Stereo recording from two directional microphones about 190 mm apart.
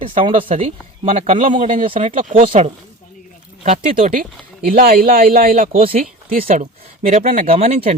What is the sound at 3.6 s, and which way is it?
Speech, 40° right (ahead or behind).